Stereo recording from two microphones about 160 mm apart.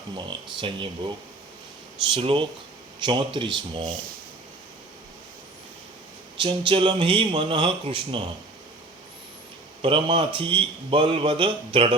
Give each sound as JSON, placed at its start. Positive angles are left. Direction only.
{"t": 0.6, "sound": "a man's voice", "side_deg": -30}
{"t": 2.1, "sound": "a man's voice", "side_deg": -30}
{"t": 6.3, "sound": "a man's voice", "side_deg": -30}
{"t": 9.8, "sound": "a man's voice", "side_deg": -35}